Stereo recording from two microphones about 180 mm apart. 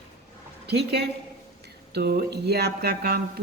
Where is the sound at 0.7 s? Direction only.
70° right (ahead or behind).